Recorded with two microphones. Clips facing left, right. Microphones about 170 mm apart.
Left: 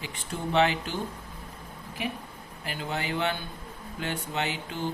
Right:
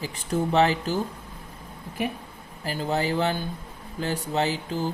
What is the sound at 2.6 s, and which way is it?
Speech, 35° right (ahead or behind).